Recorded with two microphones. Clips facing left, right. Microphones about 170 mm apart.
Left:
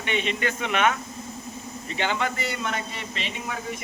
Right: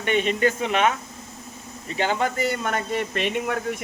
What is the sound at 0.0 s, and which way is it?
Speech, 45° right (ahead or behind).